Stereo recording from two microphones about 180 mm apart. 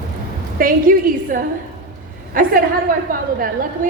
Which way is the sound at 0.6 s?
50° right (ahead or behind).